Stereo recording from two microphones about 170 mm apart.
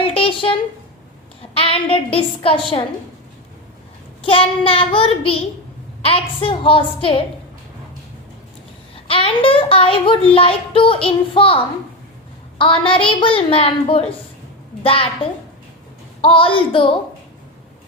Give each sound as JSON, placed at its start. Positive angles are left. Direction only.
{"t": 0.0, "sound": "a sound", "side_deg": 30}
{"t": 1.4, "sound": "a woman's voice", "side_deg": 35}
{"t": 4.2, "sound": "child singing", "side_deg": 30}
{"t": 9.0, "sound": "child singing", "side_deg": 35}